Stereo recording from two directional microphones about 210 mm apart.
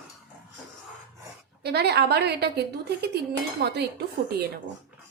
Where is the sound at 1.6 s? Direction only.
50° right (ahead or behind).